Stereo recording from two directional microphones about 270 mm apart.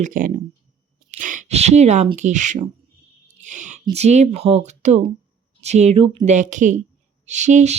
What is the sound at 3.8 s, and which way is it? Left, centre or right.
Speech, right.